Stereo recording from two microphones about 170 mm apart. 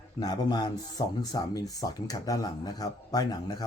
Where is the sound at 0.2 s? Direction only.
25° left (ahead or behind).